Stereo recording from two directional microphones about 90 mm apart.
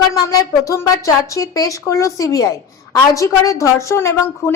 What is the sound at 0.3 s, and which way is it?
A woman's voice, 40° left (ahead or behind).